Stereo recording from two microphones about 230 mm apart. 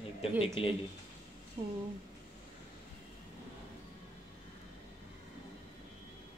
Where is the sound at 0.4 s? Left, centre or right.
Left.